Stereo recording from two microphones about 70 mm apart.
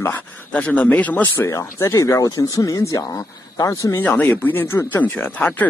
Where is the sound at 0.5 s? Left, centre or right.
Centre.